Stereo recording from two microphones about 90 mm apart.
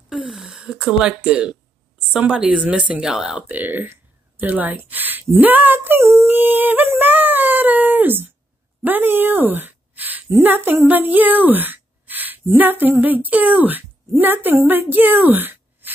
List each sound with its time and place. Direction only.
0.1 s a sound: 5° right (ahead or behind)
2.1 s speech: 10° right (ahead or behind)
3.4 s a woman's voice: 20° right (ahead or behind)